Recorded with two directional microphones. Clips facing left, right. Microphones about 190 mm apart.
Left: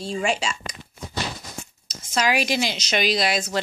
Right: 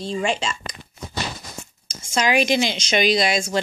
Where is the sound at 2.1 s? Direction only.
5° left (ahead or behind).